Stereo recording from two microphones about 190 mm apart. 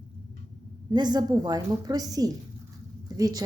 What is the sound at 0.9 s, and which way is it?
A woman's voice, 20° right (ahead or behind).